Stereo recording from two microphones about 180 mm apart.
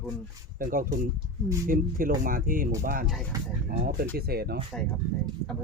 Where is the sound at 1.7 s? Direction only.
50° right (ahead or behind).